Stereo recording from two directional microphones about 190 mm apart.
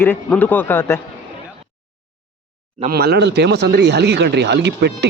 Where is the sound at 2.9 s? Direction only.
55° right (ahead or behind).